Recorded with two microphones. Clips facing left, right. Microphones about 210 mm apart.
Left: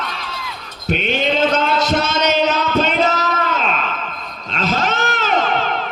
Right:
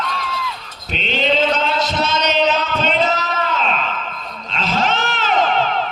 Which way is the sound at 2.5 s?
45° left (ahead or behind).